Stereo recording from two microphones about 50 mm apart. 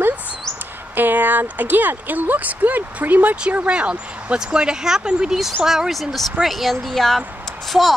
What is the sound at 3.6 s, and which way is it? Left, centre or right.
Speech, right.